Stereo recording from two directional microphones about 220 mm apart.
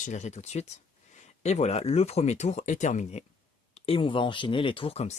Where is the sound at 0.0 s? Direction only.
30° left (ahead or behind).